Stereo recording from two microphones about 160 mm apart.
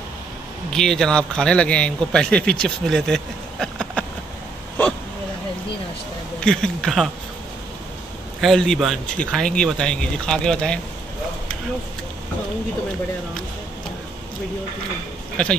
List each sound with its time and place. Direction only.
0.7 s a man's voice: 5° left (ahead or behind)
6.4 s a man's voice: 5° left (ahead or behind)
8.4 s a man's voice: centre (ahead or behind)
15.4 s a man's voice: 5° left (ahead or behind)